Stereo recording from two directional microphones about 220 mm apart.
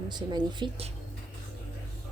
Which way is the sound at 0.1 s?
20° right (ahead or behind).